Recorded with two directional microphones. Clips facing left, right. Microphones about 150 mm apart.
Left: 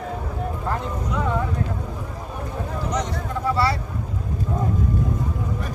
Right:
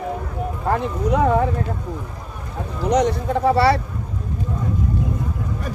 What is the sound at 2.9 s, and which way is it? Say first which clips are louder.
Speech: right 11 dB; 70° right (ahead or behind).